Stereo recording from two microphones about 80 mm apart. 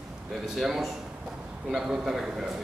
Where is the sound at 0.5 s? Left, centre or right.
Centre.